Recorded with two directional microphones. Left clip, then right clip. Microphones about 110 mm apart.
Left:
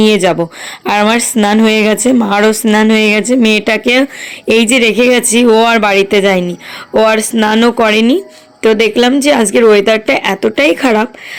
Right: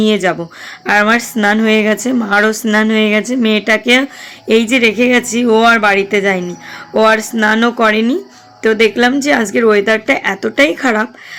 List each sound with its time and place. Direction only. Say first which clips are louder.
0.0 s speech: left 4 dB; 40° left (ahead or behind)